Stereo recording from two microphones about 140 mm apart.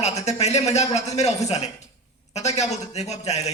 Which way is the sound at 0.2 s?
50° left (ahead or behind).